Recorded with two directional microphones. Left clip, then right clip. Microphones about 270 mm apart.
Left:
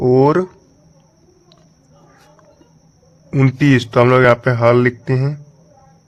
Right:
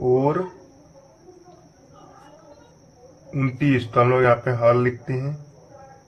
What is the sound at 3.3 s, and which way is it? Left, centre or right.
A man's voice, left.